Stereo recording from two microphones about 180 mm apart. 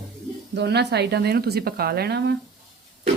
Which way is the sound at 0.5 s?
70° right (ahead or behind).